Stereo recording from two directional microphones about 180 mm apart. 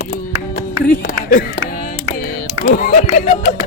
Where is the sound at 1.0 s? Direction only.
50° left (ahead or behind).